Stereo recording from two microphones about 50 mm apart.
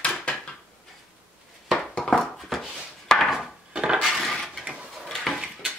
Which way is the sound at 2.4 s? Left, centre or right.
Centre.